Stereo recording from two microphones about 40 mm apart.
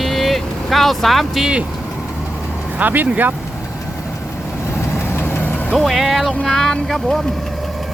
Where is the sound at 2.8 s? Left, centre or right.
Right.